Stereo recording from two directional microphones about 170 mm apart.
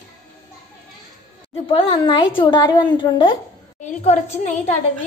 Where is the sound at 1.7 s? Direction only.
30° left (ahead or behind).